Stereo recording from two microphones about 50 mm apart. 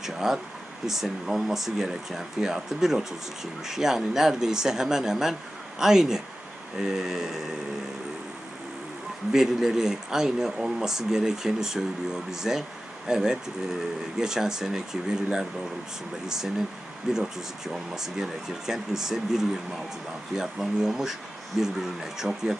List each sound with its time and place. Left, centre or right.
0.0 s speech: centre
9.3 s speech: centre